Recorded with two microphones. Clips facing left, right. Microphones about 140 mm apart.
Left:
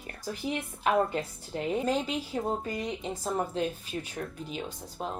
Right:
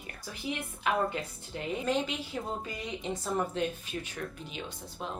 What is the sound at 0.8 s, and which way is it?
A woman's voice, 40° left (ahead or behind).